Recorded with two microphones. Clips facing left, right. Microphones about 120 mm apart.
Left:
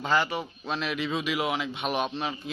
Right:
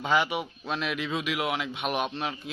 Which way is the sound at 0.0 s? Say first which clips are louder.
Even; 5° right (ahead or behind).